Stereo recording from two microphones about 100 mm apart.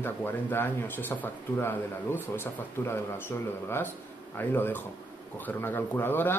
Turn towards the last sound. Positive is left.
turn(degrees=20)  # may be behind; listen again after turning